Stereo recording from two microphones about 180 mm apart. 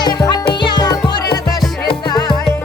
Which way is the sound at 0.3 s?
25° left (ahead or behind).